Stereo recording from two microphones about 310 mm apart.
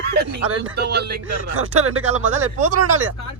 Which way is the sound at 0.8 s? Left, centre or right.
Right.